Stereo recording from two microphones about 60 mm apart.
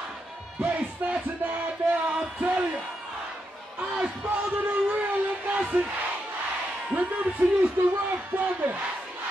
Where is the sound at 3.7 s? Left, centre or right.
Centre.